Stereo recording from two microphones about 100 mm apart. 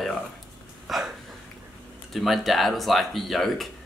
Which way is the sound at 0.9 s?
Centre (ahead or behind).